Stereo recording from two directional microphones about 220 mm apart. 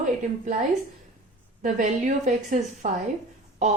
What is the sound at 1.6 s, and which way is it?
A woman's voice, 35° right (ahead or behind).